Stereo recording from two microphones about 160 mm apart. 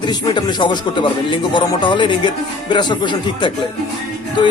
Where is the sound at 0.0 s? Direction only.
25° left (ahead or behind).